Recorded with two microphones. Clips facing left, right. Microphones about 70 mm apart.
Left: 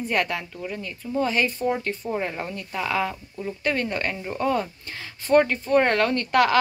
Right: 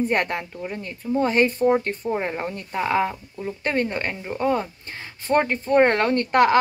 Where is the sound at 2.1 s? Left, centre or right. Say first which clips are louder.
Right 2 dB; right.